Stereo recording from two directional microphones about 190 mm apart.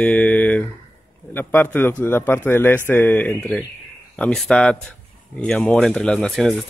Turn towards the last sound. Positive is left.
turn(degrees=0)  # may be behind; listen again after turning